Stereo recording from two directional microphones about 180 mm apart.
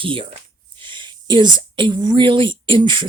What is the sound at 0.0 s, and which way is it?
Speech, 30° right (ahead or behind).